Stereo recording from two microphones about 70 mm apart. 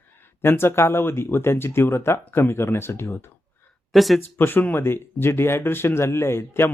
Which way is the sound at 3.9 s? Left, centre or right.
Centre.